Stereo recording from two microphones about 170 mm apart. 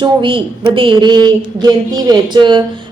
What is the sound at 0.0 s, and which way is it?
A woman's voice, 30° right (ahead or behind).